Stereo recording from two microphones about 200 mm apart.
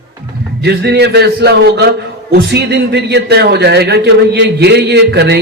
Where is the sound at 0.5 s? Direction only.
55° right (ahead or behind).